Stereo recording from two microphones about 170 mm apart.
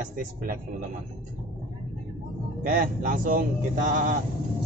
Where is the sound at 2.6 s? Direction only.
50° right (ahead or behind).